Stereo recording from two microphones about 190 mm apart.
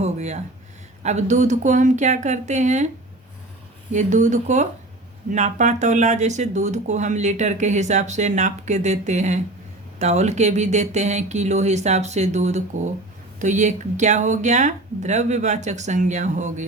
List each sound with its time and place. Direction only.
0.0 s a sound: 35° right (ahead or behind)
1.0 s speech: 40° right (ahead or behind)
3.9 s speech: 40° right (ahead or behind)